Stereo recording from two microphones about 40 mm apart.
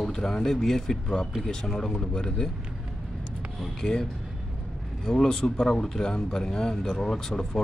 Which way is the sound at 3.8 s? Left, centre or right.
Centre.